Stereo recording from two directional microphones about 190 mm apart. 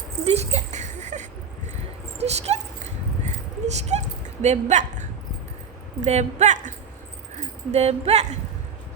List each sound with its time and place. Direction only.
0.3 s a sound: 35° right (ahead or behind)
4.4 s a woman's voice: 40° right (ahead or behind)
6.1 s speech: 35° right (ahead or behind)